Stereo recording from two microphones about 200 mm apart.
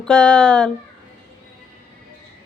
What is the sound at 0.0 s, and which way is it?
Speech, 5° left (ahead or behind).